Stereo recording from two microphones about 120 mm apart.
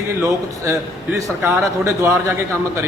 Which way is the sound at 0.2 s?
25° right (ahead or behind).